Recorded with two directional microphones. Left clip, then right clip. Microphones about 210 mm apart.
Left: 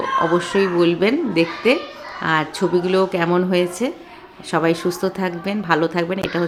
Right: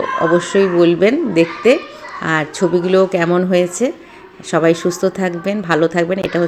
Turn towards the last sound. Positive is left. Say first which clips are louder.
# right 5 dB
turn(degrees=-5)  # may be behind; listen again after turning